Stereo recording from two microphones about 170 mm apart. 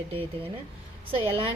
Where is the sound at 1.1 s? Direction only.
35° right (ahead or behind).